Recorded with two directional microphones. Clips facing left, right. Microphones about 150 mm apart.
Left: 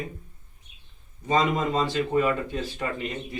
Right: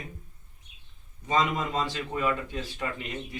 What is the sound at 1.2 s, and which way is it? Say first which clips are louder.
Speech: left 3 dB; 35° left (ahead or behind).